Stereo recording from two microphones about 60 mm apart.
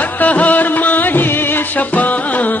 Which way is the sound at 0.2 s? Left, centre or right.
Left.